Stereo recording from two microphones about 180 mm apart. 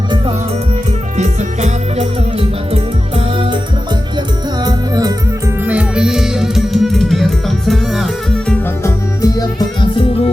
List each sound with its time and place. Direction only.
1.1 s music: 40° right (ahead or behind)
4.6 s music: 20° right (ahead or behind)
5.6 s music: 5° right (ahead or behind)
8.4 s music: 15° left (ahead or behind)